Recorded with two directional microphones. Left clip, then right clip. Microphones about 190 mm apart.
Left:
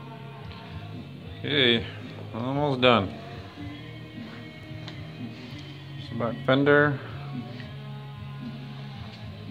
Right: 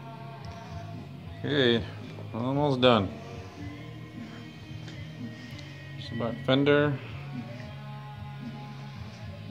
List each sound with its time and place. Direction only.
1.4 s speech: 20° right (ahead or behind)
6.1 s speech: 5° left (ahead or behind)